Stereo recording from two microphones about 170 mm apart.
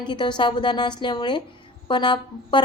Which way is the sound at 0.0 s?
25° left (ahead or behind).